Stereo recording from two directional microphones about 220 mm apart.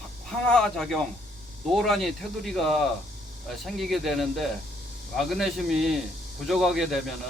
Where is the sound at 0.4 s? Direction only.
5° left (ahead or behind).